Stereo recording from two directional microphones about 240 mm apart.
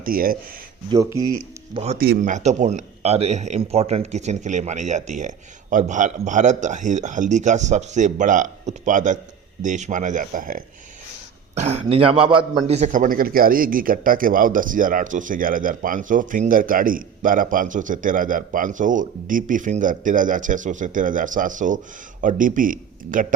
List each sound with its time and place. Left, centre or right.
0.0 s a man's voice: right
0.9 s speech: centre
1.7 s speech: right
2.0 s a man's voice: right